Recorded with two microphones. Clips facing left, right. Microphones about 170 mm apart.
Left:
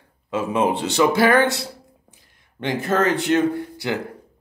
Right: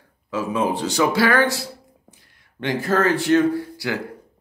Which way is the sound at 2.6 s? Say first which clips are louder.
Even; 20° left (ahead or behind).